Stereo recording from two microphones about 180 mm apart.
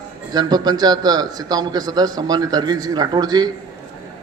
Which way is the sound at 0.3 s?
20° right (ahead or behind).